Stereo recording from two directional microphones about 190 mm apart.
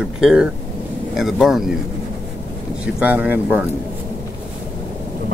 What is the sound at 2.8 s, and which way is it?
Speech, 5° right (ahead or behind).